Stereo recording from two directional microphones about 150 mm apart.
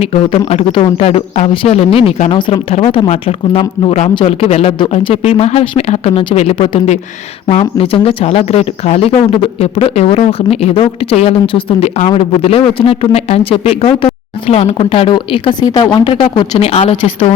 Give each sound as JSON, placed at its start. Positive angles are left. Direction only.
{"t": 0.0, "sound": "speech", "side_deg": 40}